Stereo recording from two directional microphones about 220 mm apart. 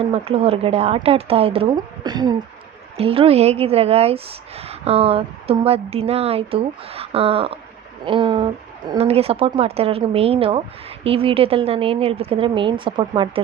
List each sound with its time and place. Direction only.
0.0 s speech: 25° right (ahead or behind)